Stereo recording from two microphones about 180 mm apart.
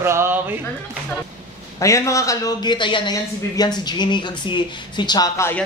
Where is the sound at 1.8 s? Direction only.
15° left (ahead or behind).